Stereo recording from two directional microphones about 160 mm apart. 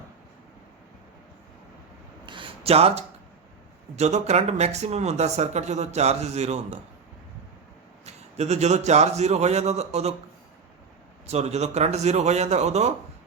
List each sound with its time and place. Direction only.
2.2 s a sound: 30° right (ahead or behind)
3.9 s speech: 45° right (ahead or behind)
8.0 s speech: 45° right (ahead or behind)
11.3 s speech: 45° right (ahead or behind)